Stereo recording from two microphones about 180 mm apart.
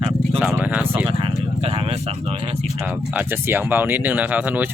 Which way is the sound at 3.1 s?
10° right (ahead or behind).